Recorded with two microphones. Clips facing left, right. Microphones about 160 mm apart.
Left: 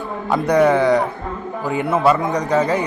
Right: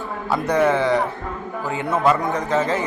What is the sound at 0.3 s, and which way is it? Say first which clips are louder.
Speech: left 4 dB; 10° left (ahead or behind).